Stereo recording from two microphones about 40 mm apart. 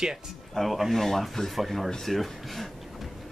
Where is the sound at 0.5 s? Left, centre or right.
Centre.